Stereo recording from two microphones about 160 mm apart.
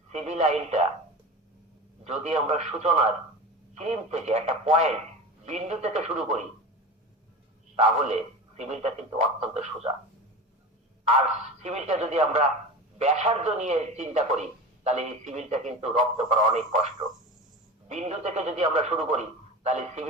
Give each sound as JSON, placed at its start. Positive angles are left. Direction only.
{"t": 0.1, "sound": "speech", "side_deg": -45}
{"t": 2.0, "sound": "speech", "side_deg": -45}
{"t": 7.8, "sound": "speech", "side_deg": -45}
{"t": 11.0, "sound": "speech", "side_deg": -45}